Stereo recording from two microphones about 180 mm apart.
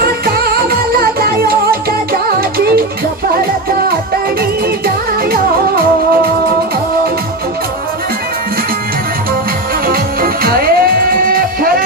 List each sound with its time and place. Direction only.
0.0 s music: 60° right (ahead or behind)
9.8 s music: 55° right (ahead or behind)